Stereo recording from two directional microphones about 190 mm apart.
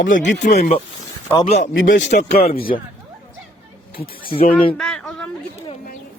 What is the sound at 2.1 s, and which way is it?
Speech, 35° left (ahead or behind).